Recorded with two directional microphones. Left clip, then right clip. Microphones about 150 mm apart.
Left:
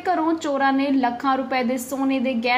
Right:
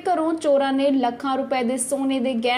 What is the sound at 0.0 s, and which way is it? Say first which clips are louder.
A woman's voice: right 1 dB; 35° right (ahead or behind).